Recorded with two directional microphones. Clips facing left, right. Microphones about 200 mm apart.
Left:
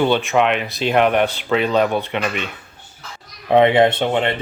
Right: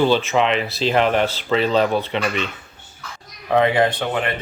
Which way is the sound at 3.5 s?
25° left (ahead or behind).